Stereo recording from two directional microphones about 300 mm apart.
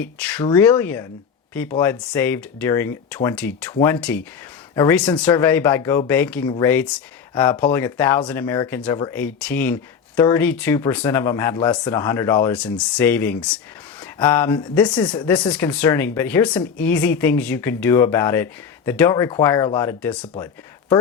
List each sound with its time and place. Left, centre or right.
0.0 s speech: centre